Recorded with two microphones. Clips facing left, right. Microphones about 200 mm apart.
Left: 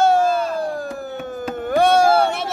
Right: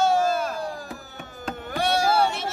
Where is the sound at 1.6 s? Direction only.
50° left (ahead or behind).